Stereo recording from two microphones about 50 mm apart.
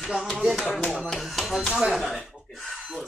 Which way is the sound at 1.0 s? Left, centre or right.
Centre.